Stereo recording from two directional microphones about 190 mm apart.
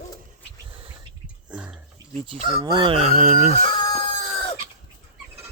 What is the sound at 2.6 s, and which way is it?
Speech, 25° right (ahead or behind).